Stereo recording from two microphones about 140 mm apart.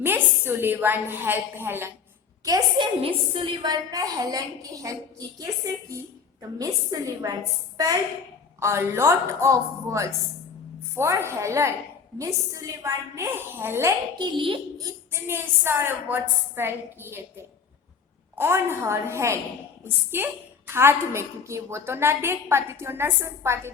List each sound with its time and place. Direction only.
0.0 s a woman's voice: 15° right (ahead or behind)
6.6 s a woman's voice: 25° right (ahead or behind)
8.5 s a woman's voice: 20° right (ahead or behind)
14.2 s a child's voice: 35° right (ahead or behind)
14.8 s a woman's voice: 15° right (ahead or behind)
18.3 s a woman's voice: 15° right (ahead or behind)